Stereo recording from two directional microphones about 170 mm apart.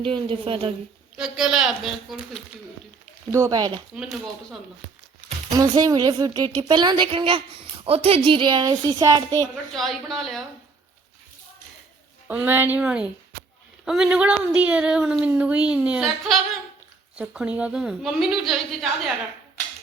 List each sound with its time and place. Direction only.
0.0 s a woman's voice: 30° right (ahead or behind)
1.1 s a woman's voice: 5° right (ahead or behind)
3.3 s a woman's voice: 20° right (ahead or behind)
3.9 s a woman's voice: 5° right (ahead or behind)
5.5 s a woman's voice: 20° right (ahead or behind)
9.7 s a woman's voice: centre (ahead or behind)
12.3 s a woman's voice: 10° right (ahead or behind)